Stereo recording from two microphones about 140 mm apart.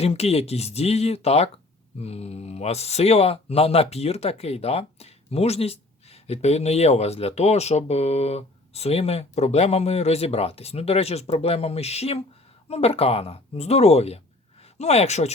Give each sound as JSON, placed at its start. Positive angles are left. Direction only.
{"t": 0.0, "sound": "speech", "side_deg": 50}